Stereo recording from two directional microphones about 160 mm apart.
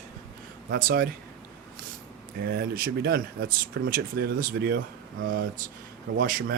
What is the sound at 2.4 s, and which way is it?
Speech, 70° right (ahead or behind).